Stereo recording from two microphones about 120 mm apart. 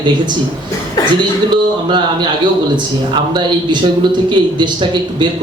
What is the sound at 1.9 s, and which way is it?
A man's voice, 40° right (ahead or behind).